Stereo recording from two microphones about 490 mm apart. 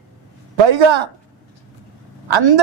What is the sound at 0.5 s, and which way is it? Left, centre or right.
Speech, right.